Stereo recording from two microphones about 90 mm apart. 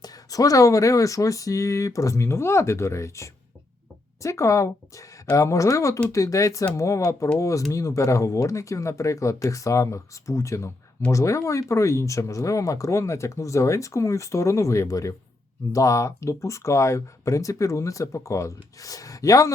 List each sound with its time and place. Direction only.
0.0 s speech: 40° left (ahead or behind)